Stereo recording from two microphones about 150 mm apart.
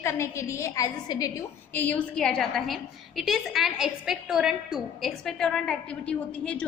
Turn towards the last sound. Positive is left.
turn(degrees=5)  # may be behind; listen again after turning